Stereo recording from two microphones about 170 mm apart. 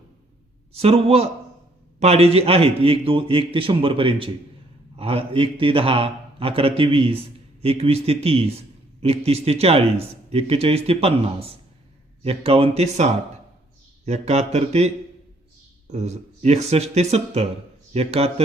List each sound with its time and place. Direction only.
0.7 s a man's voice: 35° right (ahead or behind)